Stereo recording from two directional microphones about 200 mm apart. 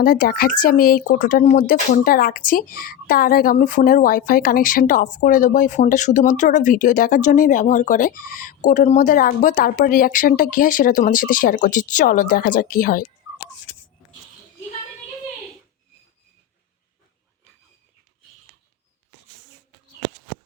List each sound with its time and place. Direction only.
0.0 s speech: 45° left (ahead or behind)